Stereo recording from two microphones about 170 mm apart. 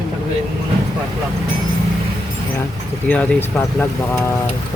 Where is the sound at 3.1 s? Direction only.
10° left (ahead or behind).